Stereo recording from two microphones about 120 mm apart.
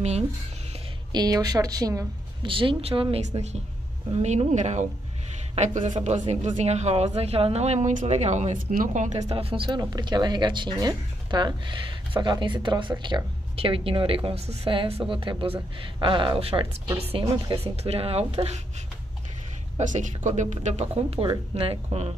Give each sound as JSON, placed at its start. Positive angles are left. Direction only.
{"t": 1.1, "sound": "speech", "side_deg": -35}
{"t": 2.4, "sound": "speech", "side_deg": -45}
{"t": 4.2, "sound": "speech", "side_deg": -70}
{"t": 6.0, "sound": "speech", "side_deg": -80}
{"t": 9.7, "sound": "speech", "side_deg": -35}
{"t": 14.7, "sound": "speech", "side_deg": -50}
{"t": 16.3, "sound": "speech", "side_deg": -55}
{"t": 17.1, "sound": "speech", "side_deg": -40}
{"t": 17.8, "sound": "speech", "side_deg": -55}
{"t": 19.8, "sound": "speech", "side_deg": -90}